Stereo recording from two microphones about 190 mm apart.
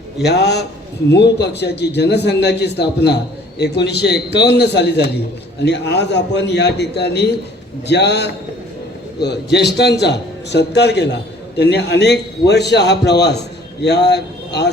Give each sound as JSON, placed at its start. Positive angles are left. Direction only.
{"t": 0.2, "sound": "a man's voice", "side_deg": 60}